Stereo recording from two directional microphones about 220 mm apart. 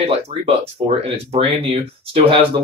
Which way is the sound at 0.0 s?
25° right (ahead or behind).